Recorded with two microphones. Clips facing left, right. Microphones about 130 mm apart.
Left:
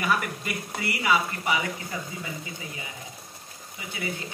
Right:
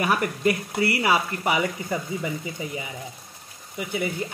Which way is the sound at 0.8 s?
50° right (ahead or behind).